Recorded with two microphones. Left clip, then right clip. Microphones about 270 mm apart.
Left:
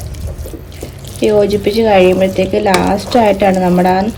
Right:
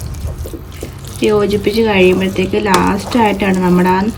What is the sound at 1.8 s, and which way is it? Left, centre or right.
A woman's voice, centre.